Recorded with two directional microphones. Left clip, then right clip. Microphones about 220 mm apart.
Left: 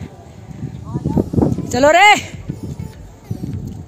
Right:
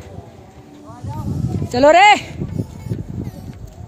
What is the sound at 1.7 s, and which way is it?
Speech, centre (ahead or behind).